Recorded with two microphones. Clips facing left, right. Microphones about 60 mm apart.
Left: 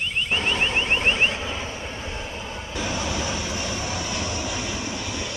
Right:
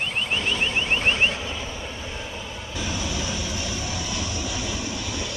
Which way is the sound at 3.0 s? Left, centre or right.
Left.